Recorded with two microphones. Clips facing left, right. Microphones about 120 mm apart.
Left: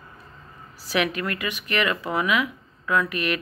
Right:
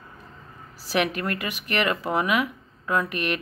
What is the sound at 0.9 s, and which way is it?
Speech, 45° right (ahead or behind).